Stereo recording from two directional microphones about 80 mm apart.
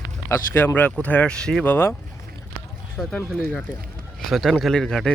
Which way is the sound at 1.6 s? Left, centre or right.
Left.